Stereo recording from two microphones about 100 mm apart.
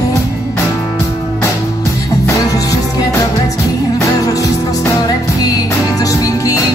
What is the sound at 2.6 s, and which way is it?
Music, 35° left (ahead or behind).